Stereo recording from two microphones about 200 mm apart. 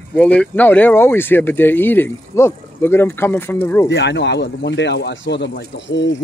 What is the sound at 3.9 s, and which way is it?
Speech, 60° left (ahead or behind).